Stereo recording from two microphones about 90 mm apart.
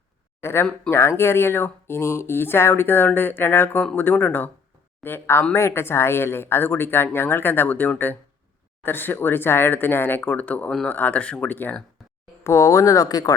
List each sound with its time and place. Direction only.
0.4 s speech: 25° left (ahead or behind)
12.4 s speech: 35° left (ahead or behind)